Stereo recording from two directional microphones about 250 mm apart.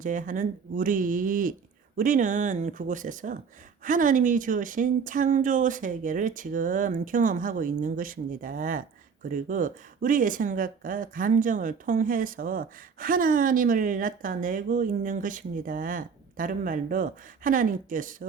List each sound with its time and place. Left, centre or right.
0.0 s speech: right